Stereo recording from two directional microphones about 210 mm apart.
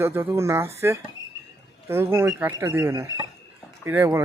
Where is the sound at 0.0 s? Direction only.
10° right (ahead or behind).